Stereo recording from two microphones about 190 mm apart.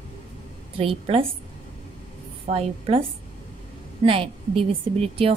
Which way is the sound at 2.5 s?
40° right (ahead or behind).